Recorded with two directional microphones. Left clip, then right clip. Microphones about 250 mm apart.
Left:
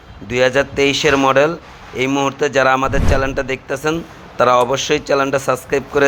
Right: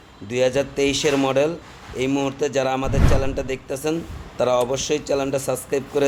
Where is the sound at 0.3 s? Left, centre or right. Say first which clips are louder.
Left 6 dB; centre.